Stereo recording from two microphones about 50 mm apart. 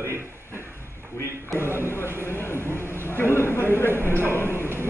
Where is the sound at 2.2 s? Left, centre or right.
Left.